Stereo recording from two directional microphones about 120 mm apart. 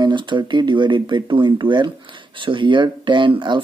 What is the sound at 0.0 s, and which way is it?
Speech, 40° right (ahead or behind).